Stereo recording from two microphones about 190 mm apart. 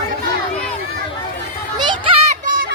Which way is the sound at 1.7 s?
25° right (ahead or behind).